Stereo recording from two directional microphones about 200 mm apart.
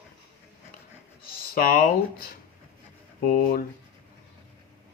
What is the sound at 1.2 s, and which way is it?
Speech, 45° left (ahead or behind).